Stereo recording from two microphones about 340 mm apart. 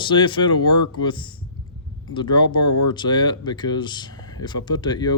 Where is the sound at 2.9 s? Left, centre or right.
Centre.